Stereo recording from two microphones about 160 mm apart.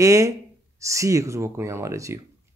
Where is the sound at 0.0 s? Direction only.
20° right (ahead or behind).